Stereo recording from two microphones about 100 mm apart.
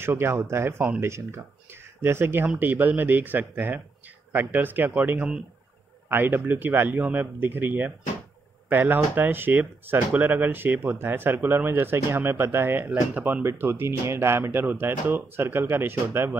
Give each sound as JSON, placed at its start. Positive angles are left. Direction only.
{"t": 0.0, "sound": "speech", "side_deg": -25}